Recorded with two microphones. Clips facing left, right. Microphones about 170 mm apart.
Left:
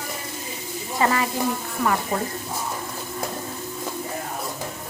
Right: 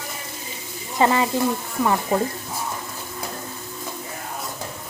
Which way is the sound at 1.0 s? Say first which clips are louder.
Right 3 dB; 25° right (ahead or behind).